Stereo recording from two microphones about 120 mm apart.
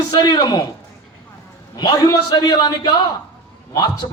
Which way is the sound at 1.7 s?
35° left (ahead or behind).